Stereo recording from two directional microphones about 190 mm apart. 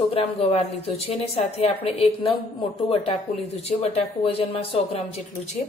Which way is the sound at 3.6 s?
35° left (ahead or behind).